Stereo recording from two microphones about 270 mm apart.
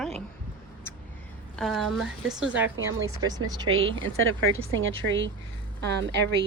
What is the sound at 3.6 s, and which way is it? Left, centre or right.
A woman's voice, right.